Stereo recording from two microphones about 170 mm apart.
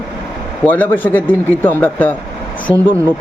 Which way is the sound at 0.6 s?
10° left (ahead or behind).